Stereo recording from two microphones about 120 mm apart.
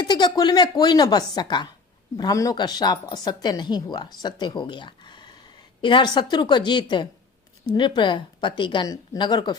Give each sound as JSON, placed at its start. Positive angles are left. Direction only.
{"t": 0.0, "sound": "speech", "side_deg": 40}